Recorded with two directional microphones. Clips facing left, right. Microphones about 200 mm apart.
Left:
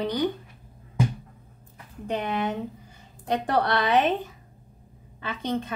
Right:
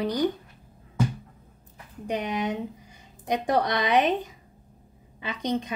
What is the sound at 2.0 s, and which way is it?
A woman's voice, 15° right (ahead or behind).